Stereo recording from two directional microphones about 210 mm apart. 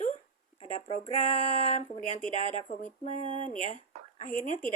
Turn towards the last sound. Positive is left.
turn(degrees=35)  # may be behind; listen again after turning